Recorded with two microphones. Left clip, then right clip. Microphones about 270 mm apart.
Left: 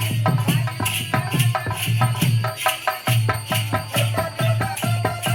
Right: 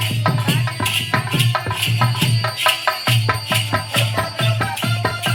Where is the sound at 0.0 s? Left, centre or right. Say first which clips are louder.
Right 3 dB; centre.